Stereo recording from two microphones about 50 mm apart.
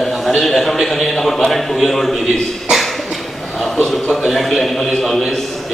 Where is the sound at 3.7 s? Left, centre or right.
Centre.